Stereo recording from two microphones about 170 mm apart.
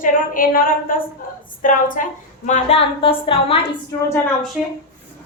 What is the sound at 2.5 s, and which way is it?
A woman's voice, 40° left (ahead or behind).